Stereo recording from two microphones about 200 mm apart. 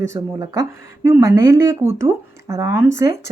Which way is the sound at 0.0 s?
15° right (ahead or behind).